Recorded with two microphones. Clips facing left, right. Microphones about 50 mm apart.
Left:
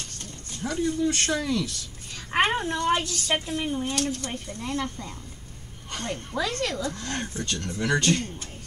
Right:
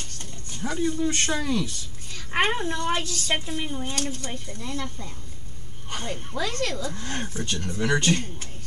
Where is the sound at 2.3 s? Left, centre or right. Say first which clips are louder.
Left 1 dB; centre.